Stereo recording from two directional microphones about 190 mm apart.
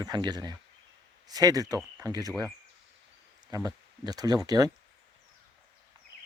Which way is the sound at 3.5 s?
20° right (ahead or behind).